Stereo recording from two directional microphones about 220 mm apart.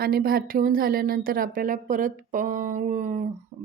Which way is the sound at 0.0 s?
45° right (ahead or behind).